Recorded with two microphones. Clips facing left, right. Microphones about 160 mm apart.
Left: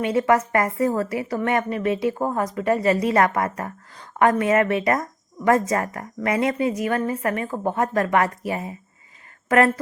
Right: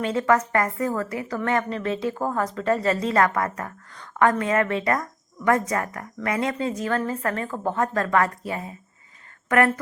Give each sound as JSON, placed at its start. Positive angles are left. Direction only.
{"t": 0.2, "sound": "a woman's voice", "side_deg": 20}